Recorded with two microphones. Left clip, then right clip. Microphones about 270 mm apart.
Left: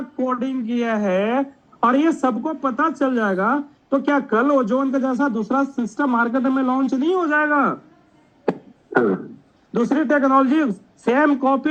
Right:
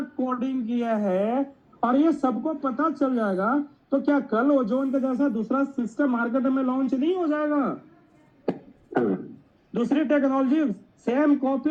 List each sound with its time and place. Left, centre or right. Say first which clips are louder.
0.2 s a woman's voice: left 5 dB; left
8.4 s beatboxing: left 6 dB; left
9.7 s a woman's voice: left 4 dB; left